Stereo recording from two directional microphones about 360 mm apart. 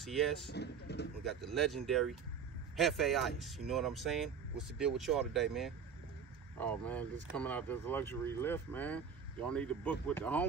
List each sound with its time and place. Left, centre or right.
0.0 s speech: centre
0.5 s speech: left
1.4 s speech: centre